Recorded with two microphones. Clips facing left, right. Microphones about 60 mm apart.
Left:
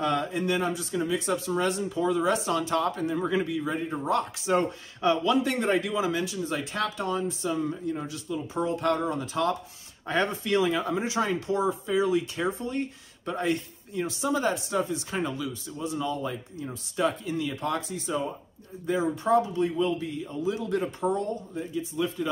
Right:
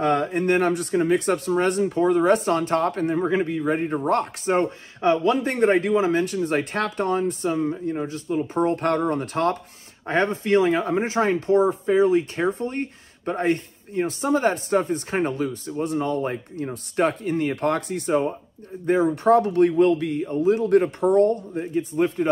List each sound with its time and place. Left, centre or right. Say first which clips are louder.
0.0 s speech: right 6 dB; right
3.2 s speech: right 5 dB; right
10.0 s speech: right 5 dB; right
20.2 s speech: right 10 dB; right